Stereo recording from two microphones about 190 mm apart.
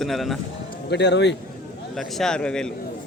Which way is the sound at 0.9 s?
65° left (ahead or behind).